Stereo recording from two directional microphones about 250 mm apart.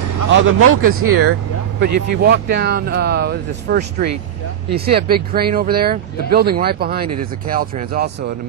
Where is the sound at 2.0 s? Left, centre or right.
Right.